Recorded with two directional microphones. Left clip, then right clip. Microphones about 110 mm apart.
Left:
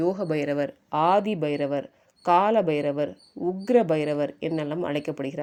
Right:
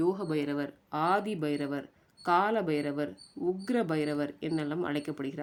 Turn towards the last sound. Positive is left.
turn(degrees=40)  # may be behind; listen again after turning